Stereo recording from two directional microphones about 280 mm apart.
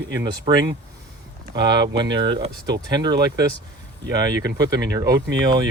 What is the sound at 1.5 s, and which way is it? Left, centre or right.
Speech, centre.